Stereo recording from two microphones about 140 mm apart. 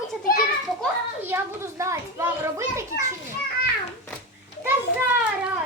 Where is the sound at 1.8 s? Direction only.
20° right (ahead or behind).